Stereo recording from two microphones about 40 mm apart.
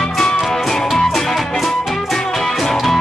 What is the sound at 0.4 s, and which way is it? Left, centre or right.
Music, centre.